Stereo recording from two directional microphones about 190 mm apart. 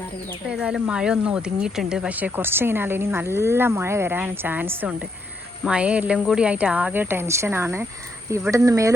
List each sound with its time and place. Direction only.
0.5 s speech: 5° right (ahead or behind)